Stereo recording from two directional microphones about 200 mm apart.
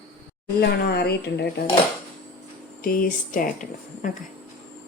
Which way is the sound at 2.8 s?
45° left (ahead or behind).